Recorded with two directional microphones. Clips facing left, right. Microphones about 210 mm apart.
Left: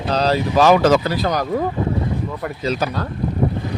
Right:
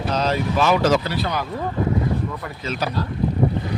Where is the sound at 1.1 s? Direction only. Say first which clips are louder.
Left 4 dB; 40° left (ahead or behind).